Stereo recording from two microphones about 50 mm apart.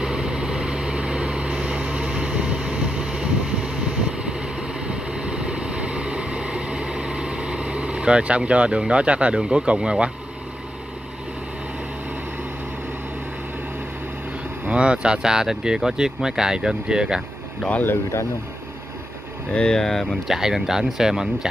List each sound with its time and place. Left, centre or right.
0.0 s vehicle: centre
14.7 s speech: right
19.5 s speech: centre
19.8 s speech: centre
20.2 s speech: centre